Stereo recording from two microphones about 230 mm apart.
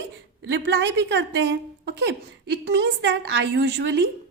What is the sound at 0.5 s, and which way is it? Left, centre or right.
A woman's voice, right.